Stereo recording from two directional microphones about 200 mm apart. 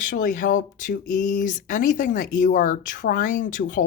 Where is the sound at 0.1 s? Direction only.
40° left (ahead or behind).